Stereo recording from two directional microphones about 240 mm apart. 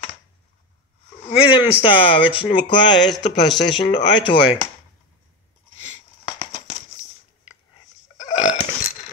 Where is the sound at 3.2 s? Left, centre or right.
Left.